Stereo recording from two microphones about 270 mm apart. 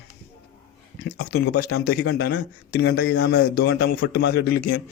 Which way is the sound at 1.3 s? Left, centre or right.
Left.